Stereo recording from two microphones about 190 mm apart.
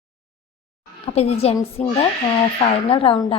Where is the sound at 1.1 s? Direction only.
35° left (ahead or behind).